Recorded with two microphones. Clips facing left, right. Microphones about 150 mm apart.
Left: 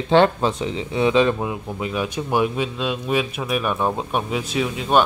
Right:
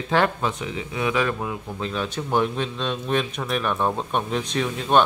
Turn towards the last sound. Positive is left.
turn(degrees=5)  # may be behind; listen again after turning